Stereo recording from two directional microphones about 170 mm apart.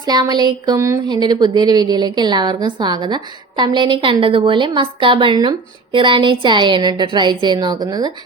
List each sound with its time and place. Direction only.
0.1 s a woman's voice: 25° right (ahead or behind)